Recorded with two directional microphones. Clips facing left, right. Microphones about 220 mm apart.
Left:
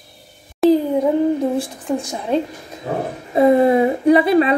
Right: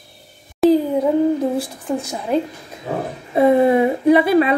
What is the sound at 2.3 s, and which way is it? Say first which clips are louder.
Speech: even; 25° left (ahead or behind).